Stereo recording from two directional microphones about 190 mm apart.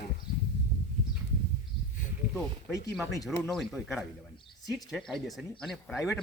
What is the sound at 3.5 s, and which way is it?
Speech, centre (ahead or behind).